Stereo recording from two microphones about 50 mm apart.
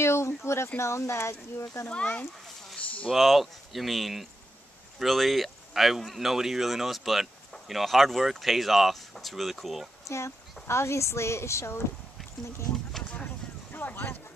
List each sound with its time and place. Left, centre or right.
0.0 s a sound: left
0.4 s speech: left
1.9 s speech: left
3.1 s speech: centre
10.0 s speech: left
13.2 s a sound: left